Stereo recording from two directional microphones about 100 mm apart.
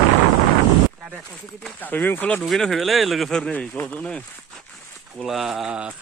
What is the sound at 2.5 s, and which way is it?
Speech, centre (ahead or behind).